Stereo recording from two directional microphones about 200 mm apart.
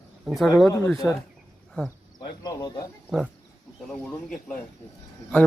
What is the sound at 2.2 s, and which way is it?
Speech, 20° left (ahead or behind).